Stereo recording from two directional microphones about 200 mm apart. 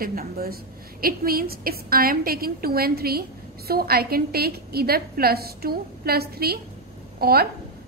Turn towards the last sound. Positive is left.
turn(degrees=-50)  # may be behind; listen again after turning